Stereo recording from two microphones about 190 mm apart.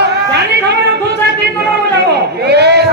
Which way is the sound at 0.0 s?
60° right (ahead or behind).